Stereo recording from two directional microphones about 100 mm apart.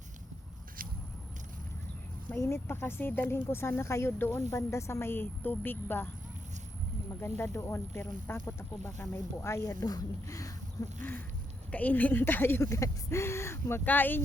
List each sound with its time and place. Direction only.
2.3 s speech: 25° left (ahead or behind)
7.2 s speech: 25° left (ahead or behind)
11.7 s speech: 15° left (ahead or behind)